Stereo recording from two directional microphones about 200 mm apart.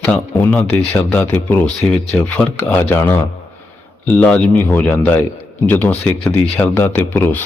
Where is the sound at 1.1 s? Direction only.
5° left (ahead or behind).